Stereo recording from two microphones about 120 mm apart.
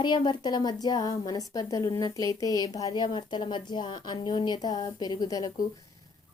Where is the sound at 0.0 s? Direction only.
40° left (ahead or behind).